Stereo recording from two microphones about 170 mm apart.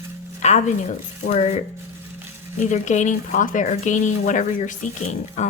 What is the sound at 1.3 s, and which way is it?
A woman's voice, 40° left (ahead or behind).